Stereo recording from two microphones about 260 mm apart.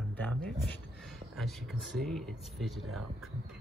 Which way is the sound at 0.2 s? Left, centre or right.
Centre.